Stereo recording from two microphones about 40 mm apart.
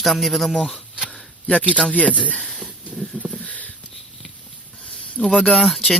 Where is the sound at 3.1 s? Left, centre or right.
Right.